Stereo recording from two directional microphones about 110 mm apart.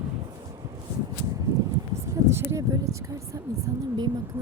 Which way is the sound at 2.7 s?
30° right (ahead or behind).